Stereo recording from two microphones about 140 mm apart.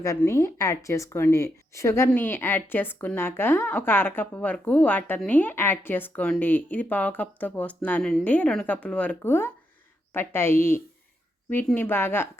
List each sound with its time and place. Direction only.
0.2 s speech: 20° left (ahead or behind)